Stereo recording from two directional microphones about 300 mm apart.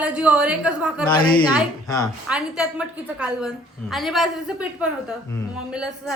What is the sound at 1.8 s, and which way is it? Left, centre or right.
Speech, centre.